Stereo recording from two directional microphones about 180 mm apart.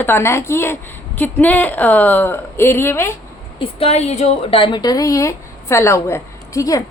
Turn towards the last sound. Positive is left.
turn(degrees=20)  # may be behind; listen again after turning